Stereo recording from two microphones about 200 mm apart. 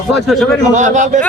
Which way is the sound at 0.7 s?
40° right (ahead or behind).